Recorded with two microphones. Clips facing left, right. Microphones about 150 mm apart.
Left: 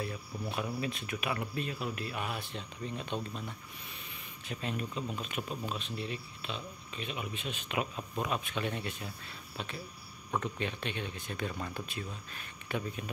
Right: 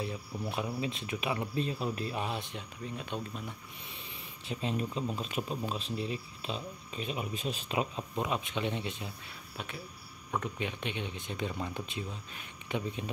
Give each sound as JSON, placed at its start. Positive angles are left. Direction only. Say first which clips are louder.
{"t": 0.0, "sound": "speech", "louder": "right 1 dB", "side_deg": -20}
{"t": 2.5, "sound": "speech", "louder": "left 1 dB", "side_deg": -5}
{"t": 4.5, "sound": "speech", "louder": "right 3 dB", "side_deg": -25}
{"t": 10.6, "sound": "speech", "louder": "even", "side_deg": -15}